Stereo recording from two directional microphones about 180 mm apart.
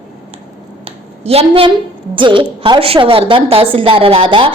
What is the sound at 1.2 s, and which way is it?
A woman's voice, 30° right (ahead or behind).